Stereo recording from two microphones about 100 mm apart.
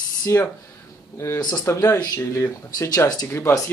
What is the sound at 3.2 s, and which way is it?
Speech, 30° left (ahead or behind).